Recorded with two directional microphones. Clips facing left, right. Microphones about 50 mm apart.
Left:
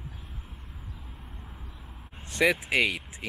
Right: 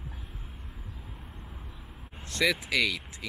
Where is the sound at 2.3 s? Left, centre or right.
Left.